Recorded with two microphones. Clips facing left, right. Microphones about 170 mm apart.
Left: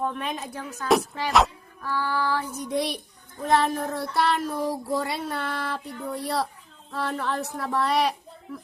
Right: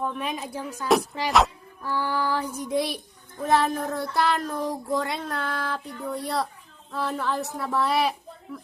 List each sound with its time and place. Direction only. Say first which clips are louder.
0.1 s female singing: right 1 dB; 10° right (ahead or behind)
1.9 s female singing: even; 15° right (ahead or behind)
3.4 s child singing: even; centre (ahead or behind)